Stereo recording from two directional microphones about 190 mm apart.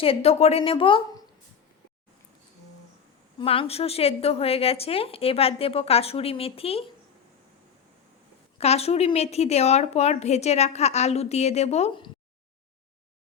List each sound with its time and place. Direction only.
0.0 s a woman's voice: 30° left (ahead or behind)
3.3 s a woman's voice: 30° left (ahead or behind)
8.5 s a woman's voice: 35° left (ahead or behind)